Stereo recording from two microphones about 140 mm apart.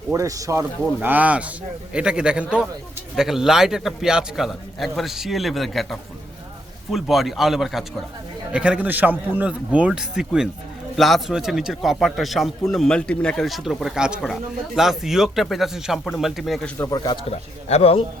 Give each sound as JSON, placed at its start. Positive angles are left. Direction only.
{"t": 0.1, "sound": "speech", "side_deg": -25}
{"t": 0.9, "sound": "a man's voice", "side_deg": -10}
{"t": 16.7, "sound": "speech", "side_deg": 20}
{"t": 17.0, "sound": "speech", "side_deg": 30}
{"t": 17.7, "sound": "speech", "side_deg": 45}